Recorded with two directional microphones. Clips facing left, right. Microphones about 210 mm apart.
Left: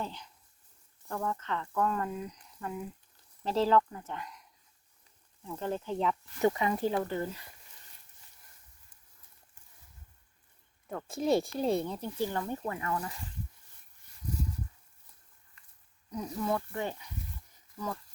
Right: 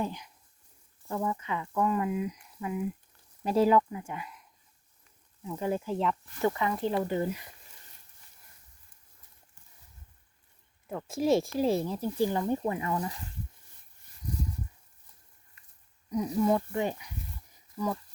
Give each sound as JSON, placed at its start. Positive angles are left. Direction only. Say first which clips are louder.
{"t": 0.0, "sound": "speech", "louder": "right 5 dB", "side_deg": -15}
{"t": 6.4, "sound": "speech", "louder": "left 1 dB", "side_deg": 20}
{"t": 6.9, "sound": "speech", "louder": "right 3 dB", "side_deg": -15}
{"t": 10.8, "sound": "speech", "louder": "right 3 dB", "side_deg": -5}
{"t": 16.0, "sound": "speech", "louder": "right 7 dB", "side_deg": -10}